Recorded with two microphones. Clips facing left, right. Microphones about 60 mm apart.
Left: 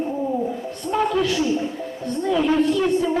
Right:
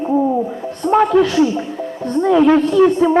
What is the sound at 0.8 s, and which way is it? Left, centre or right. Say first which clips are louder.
A man's voice: right 8 dB; right.